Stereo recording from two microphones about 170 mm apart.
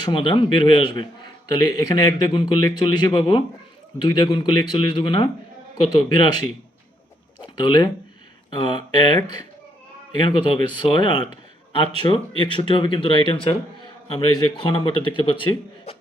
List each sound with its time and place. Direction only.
0.0 s a man's voice: 25° left (ahead or behind)
7.4 s a man's voice: 25° left (ahead or behind)